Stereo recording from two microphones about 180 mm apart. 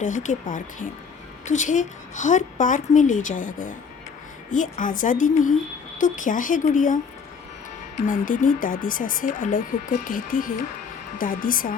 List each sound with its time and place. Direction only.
0.0 s speech: 45° left (ahead or behind)
8.0 s speech: 50° left (ahead or behind)